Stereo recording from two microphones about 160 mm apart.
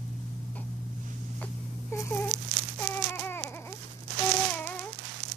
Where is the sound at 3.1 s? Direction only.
15° left (ahead or behind).